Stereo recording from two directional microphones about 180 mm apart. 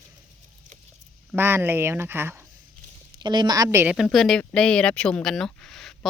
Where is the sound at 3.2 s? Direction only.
25° right (ahead or behind); by 4.0 s 10° right (ahead or behind).